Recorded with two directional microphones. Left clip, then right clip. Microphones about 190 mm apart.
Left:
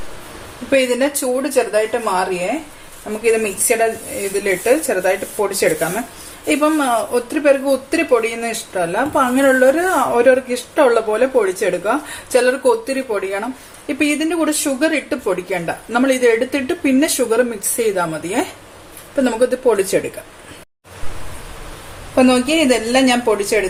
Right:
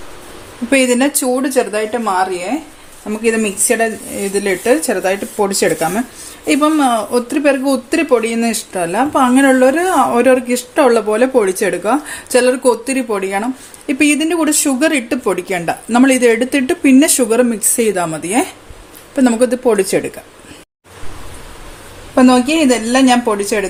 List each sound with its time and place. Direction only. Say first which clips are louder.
0.7 s speech: right 2 dB; 55° right (ahead or behind)
4.2 s a woman's voice: right 2 dB; 45° right (ahead or behind)
22.1 s speech: right 3 dB; 45° right (ahead or behind)